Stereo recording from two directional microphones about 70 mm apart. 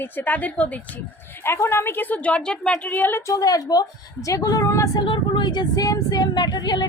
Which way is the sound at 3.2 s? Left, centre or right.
Left.